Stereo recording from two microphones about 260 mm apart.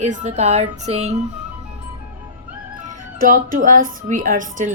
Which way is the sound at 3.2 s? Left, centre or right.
Right.